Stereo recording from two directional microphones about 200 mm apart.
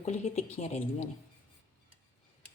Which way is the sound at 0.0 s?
35° left (ahead or behind).